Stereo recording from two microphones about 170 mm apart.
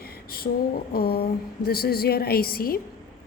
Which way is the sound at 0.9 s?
65° left (ahead or behind).